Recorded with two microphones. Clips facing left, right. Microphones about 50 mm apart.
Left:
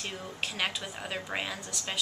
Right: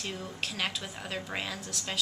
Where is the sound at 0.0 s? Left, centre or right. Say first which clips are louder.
Even; centre.